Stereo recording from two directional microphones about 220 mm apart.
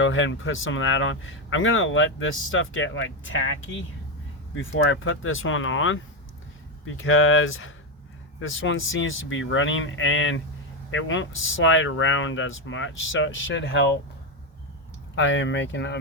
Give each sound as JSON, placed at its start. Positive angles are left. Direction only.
{"t": 0.0, "sound": "speech", "side_deg": 60}
{"t": 15.1, "sound": "speech", "side_deg": 60}